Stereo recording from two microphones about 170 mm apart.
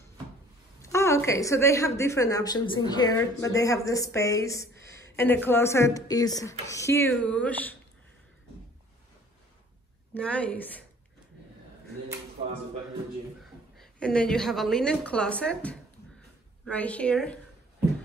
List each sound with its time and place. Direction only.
0.8 s a woman's voice: 15° left (ahead or behind)
10.1 s speech: 10° left (ahead or behind)
13.7 s a woman's voice: 5° left (ahead or behind)